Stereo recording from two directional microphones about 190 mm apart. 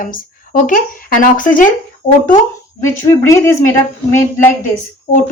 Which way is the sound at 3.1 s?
15° left (ahead or behind).